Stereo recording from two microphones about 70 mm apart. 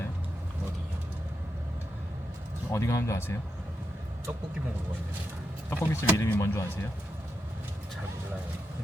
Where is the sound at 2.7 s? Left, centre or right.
Left.